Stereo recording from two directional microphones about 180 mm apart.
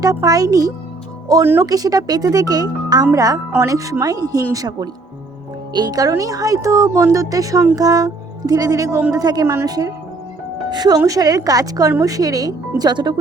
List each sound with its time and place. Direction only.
0.0 s speech: 20° right (ahead or behind)